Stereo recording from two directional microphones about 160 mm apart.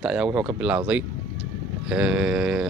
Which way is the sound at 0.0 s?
5° right (ahead or behind).